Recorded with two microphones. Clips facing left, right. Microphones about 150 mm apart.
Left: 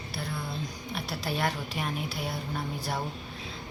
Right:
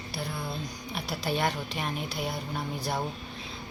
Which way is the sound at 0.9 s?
Centre (ahead or behind).